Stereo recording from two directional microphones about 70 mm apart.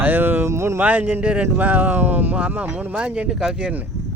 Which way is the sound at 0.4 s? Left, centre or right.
Right.